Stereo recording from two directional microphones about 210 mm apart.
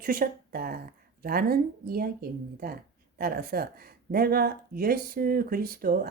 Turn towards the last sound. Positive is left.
turn(degrees=-45)  # may be behind; listen again after turning